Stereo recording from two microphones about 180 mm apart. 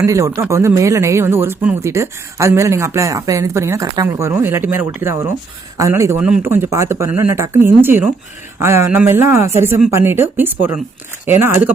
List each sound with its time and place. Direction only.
0.0 s speech: 15° right (ahead or behind)